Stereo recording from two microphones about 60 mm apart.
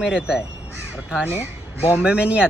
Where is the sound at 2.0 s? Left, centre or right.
Centre.